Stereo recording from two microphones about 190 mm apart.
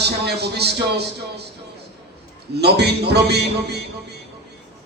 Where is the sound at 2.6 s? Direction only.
60° right (ahead or behind).